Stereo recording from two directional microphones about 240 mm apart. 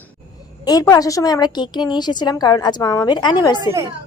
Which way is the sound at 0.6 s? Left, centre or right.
Centre.